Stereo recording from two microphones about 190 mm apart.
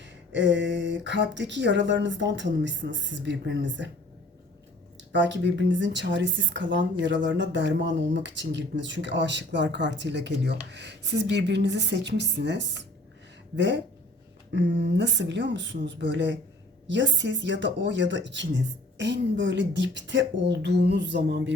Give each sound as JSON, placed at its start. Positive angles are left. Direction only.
{"t": 0.0, "sound": "speech", "side_deg": -70}
{"t": 5.1, "sound": "a woman's voice", "side_deg": -70}
{"t": 14.8, "sound": "speech", "side_deg": -70}